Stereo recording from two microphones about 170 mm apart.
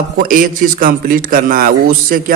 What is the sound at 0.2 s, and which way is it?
A man's voice, 55° right (ahead or behind).